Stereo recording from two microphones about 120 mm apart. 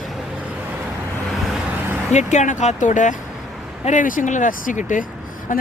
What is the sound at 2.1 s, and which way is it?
Speech, 75° left (ahead or behind).